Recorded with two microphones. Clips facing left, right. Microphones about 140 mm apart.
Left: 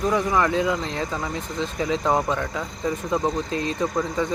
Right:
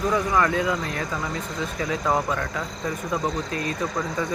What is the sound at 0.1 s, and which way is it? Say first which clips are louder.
Speech: left 1 dB; 20° left (ahead or behind).